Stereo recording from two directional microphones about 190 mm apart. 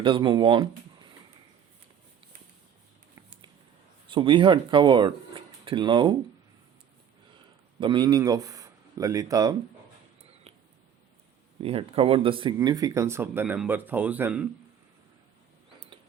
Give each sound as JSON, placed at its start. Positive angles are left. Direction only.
{"t": 0.0, "sound": "speech", "side_deg": -25}
{"t": 3.2, "sound": "a sound", "side_deg": -25}
{"t": 4.1, "sound": "speech", "side_deg": -25}
{"t": 7.8, "sound": "speech", "side_deg": -25}
{"t": 11.6, "sound": "speech", "side_deg": -30}